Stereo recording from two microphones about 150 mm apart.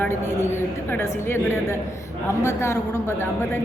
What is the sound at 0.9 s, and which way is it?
A woman's voice, 15° left (ahead or behind).